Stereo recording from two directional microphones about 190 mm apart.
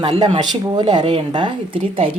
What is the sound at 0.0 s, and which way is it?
Speech, 25° right (ahead or behind).